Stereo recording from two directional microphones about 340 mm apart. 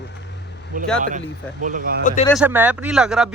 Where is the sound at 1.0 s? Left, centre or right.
Right.